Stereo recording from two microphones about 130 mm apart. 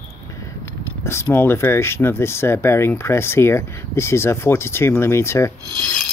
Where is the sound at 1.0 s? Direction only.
20° left (ahead or behind).